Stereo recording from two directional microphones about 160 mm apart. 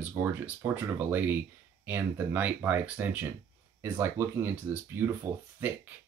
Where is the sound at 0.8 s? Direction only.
10° right (ahead or behind).